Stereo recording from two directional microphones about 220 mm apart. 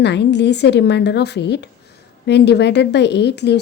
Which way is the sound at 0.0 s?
50° left (ahead or behind).